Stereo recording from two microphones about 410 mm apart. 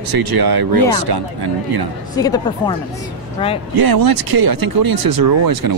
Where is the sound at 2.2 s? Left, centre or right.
Centre.